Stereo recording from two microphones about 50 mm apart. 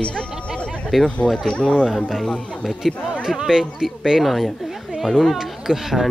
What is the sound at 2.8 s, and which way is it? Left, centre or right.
Speech, centre.